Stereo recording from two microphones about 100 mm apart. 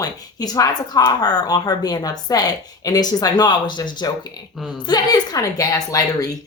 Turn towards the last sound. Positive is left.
turn(degrees=40)  # may be behind; listen again after turning